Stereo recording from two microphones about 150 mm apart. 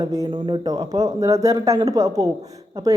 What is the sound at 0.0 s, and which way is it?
Speech, 25° right (ahead or behind).